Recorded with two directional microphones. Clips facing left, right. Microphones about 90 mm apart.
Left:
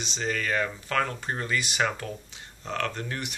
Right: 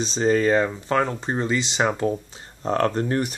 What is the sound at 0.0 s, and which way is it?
Speech, 35° right (ahead or behind).